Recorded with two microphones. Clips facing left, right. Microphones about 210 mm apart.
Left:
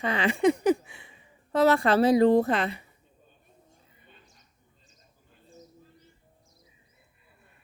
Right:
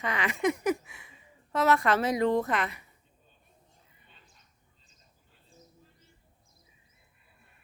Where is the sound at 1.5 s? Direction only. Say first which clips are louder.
Left 4 dB; 30° left (ahead or behind).